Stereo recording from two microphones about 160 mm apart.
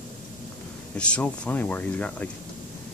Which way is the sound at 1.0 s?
5° left (ahead or behind).